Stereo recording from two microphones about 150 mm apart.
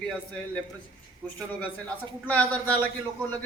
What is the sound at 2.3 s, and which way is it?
A man's voice, 10° left (ahead or behind).